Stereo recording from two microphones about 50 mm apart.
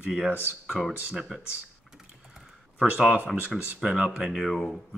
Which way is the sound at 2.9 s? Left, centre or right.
Centre.